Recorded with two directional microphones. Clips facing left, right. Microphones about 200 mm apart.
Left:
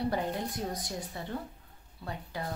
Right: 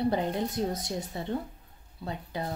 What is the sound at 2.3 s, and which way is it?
Speech, 20° right (ahead or behind).